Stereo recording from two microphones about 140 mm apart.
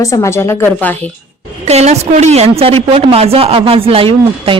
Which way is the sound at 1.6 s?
50° right (ahead or behind).